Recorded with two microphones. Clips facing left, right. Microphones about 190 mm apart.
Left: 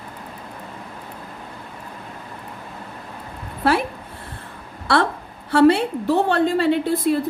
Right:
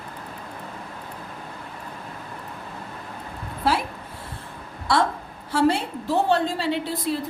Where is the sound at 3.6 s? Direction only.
60° left (ahead or behind).